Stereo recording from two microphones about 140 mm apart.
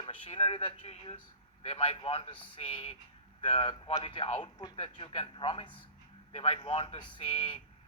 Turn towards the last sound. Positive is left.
turn(degrees=40)  # may be behind; listen again after turning